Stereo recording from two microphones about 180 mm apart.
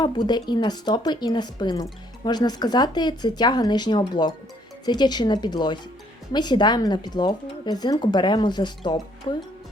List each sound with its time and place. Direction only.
0.0 s speech: 25° left (ahead or behind)